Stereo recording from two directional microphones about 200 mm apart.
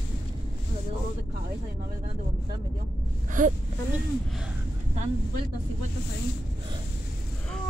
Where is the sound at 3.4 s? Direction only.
40° right (ahead or behind).